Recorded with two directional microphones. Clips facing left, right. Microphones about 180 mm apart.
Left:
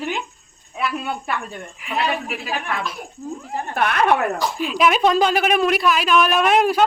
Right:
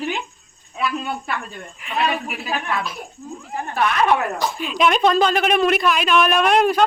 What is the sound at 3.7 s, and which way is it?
Speech, 55° left (ahead or behind).